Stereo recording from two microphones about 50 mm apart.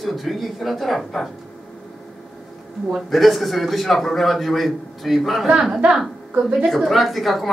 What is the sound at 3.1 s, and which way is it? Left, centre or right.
Speech, centre.